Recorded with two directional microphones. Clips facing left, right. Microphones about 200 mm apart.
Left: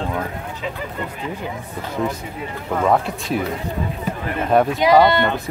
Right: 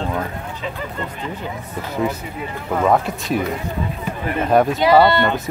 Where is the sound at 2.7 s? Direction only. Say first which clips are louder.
Right 1 dB; centre (ahead or behind).